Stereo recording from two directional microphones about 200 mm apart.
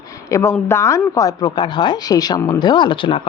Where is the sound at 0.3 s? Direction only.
15° left (ahead or behind).